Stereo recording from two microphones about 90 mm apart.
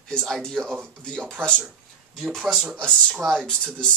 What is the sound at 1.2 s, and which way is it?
Speech, 20° right (ahead or behind).